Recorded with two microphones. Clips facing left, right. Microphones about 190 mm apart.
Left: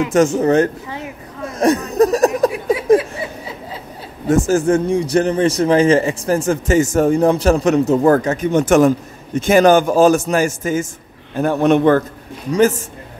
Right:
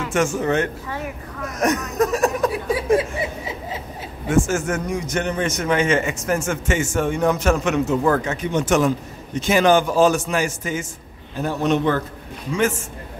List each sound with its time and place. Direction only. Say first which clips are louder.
0.4 s a man's voice: left 7 dB; 40° left (ahead or behind)
0.8 s a sound: even; 25° left (ahead or behind)
3.0 s a sound: right 1 dB; 20° right (ahead or behind)
4.3 s a man's voice: left 6 dB; 35° left (ahead or behind)
11.3 s a man's voice: left 6 dB; 55° left (ahead or behind)
12.4 s a man's voice: left 7 dB; 40° left (ahead or behind)